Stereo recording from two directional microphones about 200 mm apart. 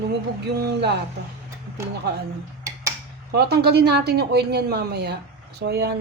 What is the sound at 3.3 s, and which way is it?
A woman's voice, 55° right (ahead or behind).